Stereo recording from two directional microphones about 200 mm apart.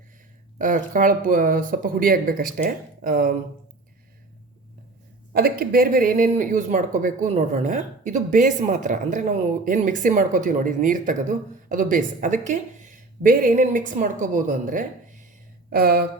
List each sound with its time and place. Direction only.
0.6 s speech: 40° right (ahead or behind)
5.3 s speech: 50° right (ahead or behind)